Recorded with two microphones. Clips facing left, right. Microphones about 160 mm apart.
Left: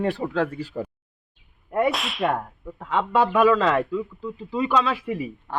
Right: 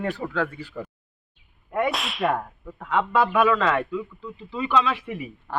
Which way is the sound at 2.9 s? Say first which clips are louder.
Left 1 dB; 25° left (ahead or behind).